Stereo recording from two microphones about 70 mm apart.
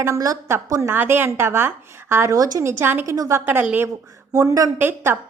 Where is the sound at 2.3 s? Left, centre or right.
Right.